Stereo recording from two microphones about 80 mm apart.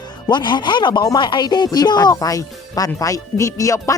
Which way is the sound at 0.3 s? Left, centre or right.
Left.